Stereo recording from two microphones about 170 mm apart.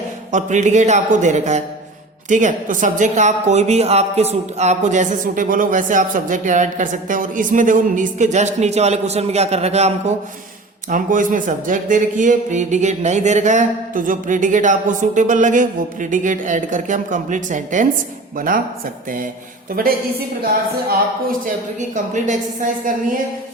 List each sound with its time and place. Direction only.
0.3 s a woman's voice: 45° right (ahead or behind)
10.8 s a woman's voice: 50° right (ahead or behind)
19.8 s speech: 60° right (ahead or behind)
21.4 s a woman's voice: 45° right (ahead or behind)